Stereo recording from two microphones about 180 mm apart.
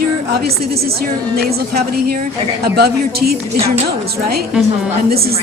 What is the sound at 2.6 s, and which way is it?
Speech, 60° right (ahead or behind).